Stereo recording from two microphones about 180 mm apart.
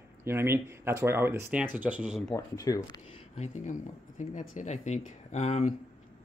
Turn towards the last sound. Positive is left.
turn(degrees=40)  # may be behind; listen again after turning